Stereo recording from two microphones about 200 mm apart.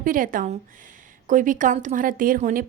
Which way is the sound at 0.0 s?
45° right (ahead or behind).